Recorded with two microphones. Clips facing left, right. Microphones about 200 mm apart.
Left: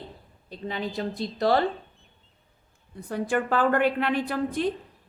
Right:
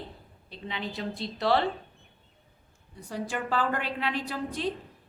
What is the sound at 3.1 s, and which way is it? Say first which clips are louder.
A woman's voice: left 6 dB; 55° left (ahead or behind).